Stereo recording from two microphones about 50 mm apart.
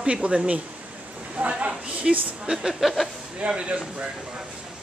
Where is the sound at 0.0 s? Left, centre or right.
Right.